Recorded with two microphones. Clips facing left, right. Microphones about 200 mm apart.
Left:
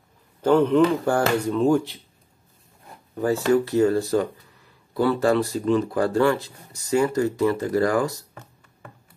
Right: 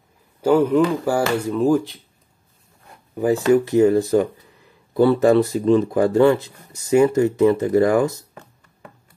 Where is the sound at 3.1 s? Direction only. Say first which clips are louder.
Right 4 dB; 15° right (ahead or behind).